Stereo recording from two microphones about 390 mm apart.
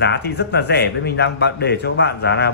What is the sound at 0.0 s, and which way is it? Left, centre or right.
A man's voice, left.